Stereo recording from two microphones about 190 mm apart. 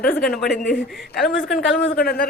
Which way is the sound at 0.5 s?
45° left (ahead or behind).